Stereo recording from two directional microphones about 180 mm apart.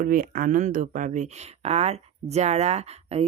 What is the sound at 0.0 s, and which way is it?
Speech, 50° right (ahead or behind).